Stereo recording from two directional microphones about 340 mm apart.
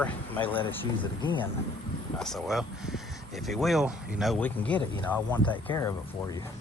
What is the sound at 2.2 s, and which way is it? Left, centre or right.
Speech, centre.